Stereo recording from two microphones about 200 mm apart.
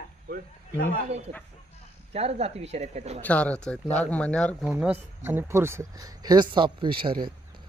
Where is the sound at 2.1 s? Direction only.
30° right (ahead or behind).